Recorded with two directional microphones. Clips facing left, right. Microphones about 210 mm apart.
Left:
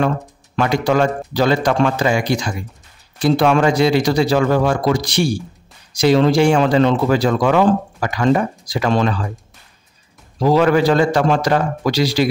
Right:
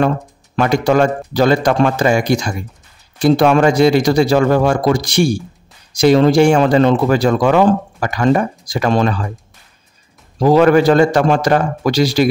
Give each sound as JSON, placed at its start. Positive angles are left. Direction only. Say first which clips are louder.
{"t": 0.6, "sound": "speech", "louder": "right 3 dB", "side_deg": -45}
{"t": 10.4, "sound": "speech", "louder": "right 4 dB", "side_deg": -50}